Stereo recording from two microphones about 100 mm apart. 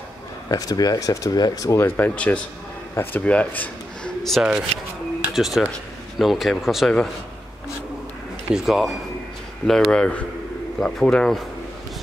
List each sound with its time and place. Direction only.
0.5 s speech: 40° left (ahead or behind)
1.9 s speech: 20° left (ahead or behind)
4.2 s speech: centre (ahead or behind)
8.5 s speech: 5° right (ahead or behind)